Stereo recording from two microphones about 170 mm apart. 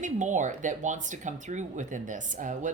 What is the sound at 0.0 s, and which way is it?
Speech, 45° right (ahead or behind).